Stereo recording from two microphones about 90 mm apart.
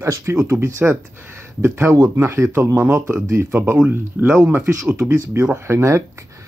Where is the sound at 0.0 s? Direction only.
30° right (ahead or behind).